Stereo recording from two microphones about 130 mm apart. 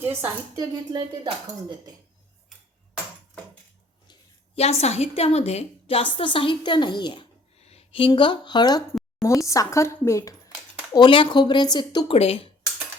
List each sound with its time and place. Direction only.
0.0 s a woman's voice: 20° right (ahead or behind)
4.5 s a woman's voice: 50° left (ahead or behind); by 8.8 s 35° left (ahead or behind)
9.5 s speech: 25° left (ahead or behind)
10.9 s a woman's voice: 35° left (ahead or behind)
12.0 s a woman's voice: 50° left (ahead or behind)